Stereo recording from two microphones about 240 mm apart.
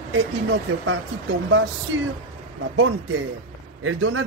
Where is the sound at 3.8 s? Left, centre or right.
Right.